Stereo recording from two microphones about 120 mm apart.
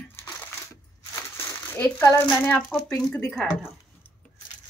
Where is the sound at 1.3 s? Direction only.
20° left (ahead or behind).